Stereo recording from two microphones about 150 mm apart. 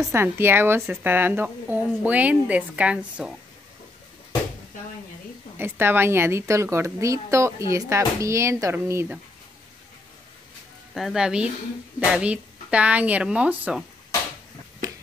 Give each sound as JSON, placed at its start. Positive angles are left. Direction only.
{"t": 0.0, "sound": "a woman's voice", "side_deg": -15}
{"t": 5.6, "sound": "a woman's voice", "side_deg": -15}
{"t": 11.0, "sound": "a woman's voice", "side_deg": -5}